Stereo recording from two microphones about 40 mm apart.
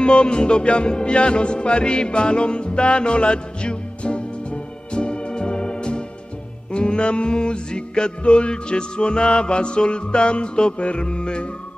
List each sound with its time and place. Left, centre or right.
0.0 s music: left